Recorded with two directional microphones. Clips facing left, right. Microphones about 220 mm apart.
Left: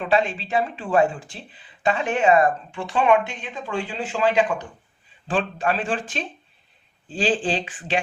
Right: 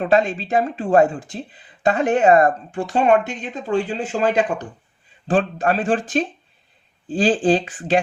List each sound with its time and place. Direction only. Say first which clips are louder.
0.0 s speech: right 4 dB; 45° right (ahead or behind)